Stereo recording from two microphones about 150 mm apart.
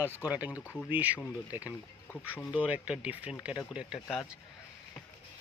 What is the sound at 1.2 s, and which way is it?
Speech, 20° left (ahead or behind).